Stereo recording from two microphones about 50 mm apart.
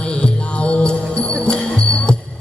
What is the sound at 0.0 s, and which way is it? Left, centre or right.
Music, centre.